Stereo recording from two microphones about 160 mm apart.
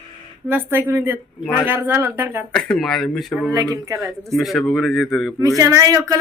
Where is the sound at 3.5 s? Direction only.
20° right (ahead or behind).